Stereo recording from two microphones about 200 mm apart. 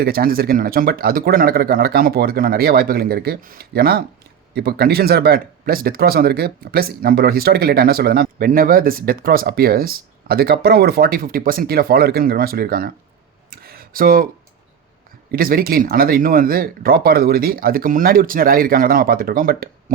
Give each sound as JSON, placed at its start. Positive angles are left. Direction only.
{"t": 0.0, "sound": "speech", "side_deg": -50}
{"t": 13.5, "sound": "a sound", "side_deg": -50}
{"t": 15.3, "sound": "speech", "side_deg": -45}